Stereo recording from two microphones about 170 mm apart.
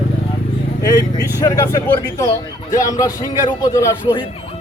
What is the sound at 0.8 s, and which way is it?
A man's voice, 20° left (ahead or behind).